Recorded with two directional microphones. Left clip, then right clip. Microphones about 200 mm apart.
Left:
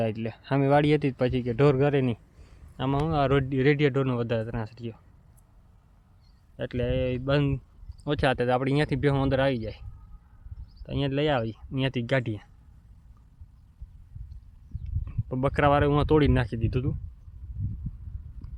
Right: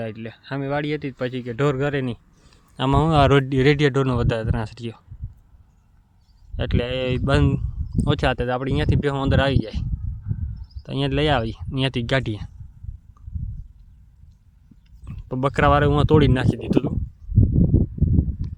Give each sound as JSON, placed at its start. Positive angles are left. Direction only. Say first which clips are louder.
{"t": 0.0, "sound": "speech", "louder": "left 2 dB", "side_deg": 15}
{"t": 2.7, "sound": "speech", "louder": "right 8 dB", "side_deg": -30}
{"t": 6.6, "sound": "speech", "louder": "right 4 dB", "side_deg": -25}
{"t": 10.8, "sound": "speech", "louder": "right 5 dB", "side_deg": -25}
{"t": 15.0, "sound": "speech", "louder": "right 5 dB", "side_deg": -20}